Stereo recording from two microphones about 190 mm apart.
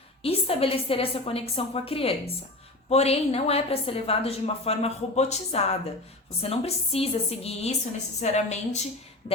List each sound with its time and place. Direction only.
0.2 s a woman's voice: 30° left (ahead or behind)